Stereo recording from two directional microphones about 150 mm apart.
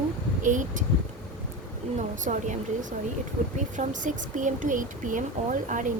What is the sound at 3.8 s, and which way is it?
A woman's voice, 60° right (ahead or behind).